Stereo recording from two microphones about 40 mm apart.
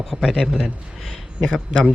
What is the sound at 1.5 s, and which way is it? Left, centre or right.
Speech, right.